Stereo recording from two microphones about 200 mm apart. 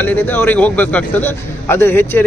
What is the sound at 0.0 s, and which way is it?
A man's voice, 10° left (ahead or behind).